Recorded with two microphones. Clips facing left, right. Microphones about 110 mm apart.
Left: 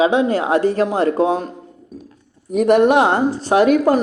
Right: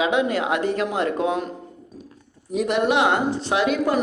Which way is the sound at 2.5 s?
50° left (ahead or behind).